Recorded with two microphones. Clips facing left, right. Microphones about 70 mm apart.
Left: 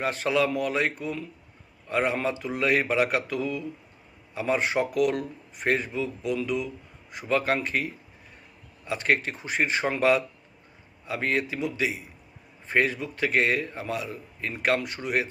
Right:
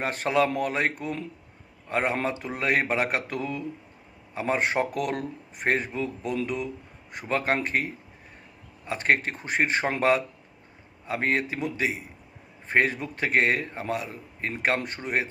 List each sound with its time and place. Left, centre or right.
0.0 s a man's voice: right
8.9 s a man's voice: right